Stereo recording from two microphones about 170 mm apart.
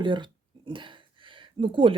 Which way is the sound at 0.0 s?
30° right (ahead or behind).